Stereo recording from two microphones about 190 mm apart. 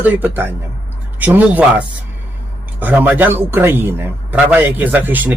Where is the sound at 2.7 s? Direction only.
10° right (ahead or behind).